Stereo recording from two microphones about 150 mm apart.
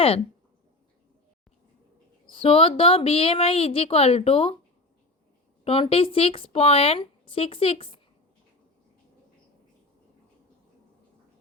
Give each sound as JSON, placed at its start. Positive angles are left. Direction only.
{"t": 2.3, "sound": "speech", "side_deg": 40}
{"t": 5.6, "sound": "speech", "side_deg": 40}